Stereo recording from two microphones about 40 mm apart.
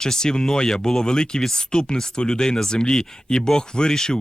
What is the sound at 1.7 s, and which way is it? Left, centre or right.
Speech, left.